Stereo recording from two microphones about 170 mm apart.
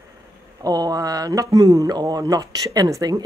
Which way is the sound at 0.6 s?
20° right (ahead or behind).